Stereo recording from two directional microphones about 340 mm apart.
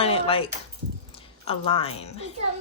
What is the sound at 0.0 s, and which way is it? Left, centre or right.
A woman's voice, centre.